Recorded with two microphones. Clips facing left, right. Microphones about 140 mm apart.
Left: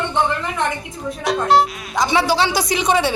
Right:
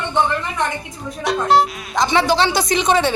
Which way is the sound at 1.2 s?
Centre (ahead or behind).